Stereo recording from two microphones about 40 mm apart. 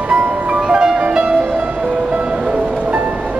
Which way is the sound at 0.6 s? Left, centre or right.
Centre.